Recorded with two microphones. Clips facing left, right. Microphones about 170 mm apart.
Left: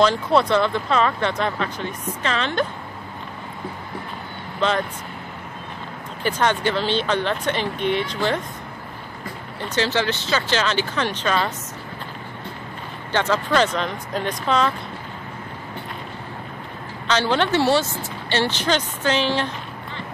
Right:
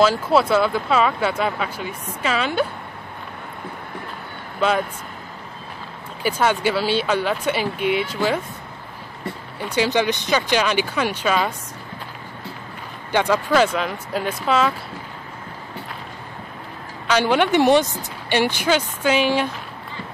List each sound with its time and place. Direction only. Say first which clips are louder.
0.0 s speech: right 1 dB; 5° right (ahead or behind)
4.6 s speech: right 2 dB; 10° right (ahead or behind)
6.2 s speech: right 1 dB; 10° right (ahead or behind)
9.6 s speech: right 2 dB; 10° right (ahead or behind)
13.1 s speech: right 2 dB; 10° right (ahead or behind)
17.1 s speech: right 2 dB; 10° right (ahead or behind)